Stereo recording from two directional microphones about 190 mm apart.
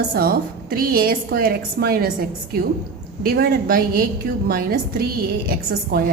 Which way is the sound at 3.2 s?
55° right (ahead or behind).